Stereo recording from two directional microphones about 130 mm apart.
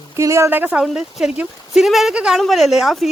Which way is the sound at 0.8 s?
Centre (ahead or behind).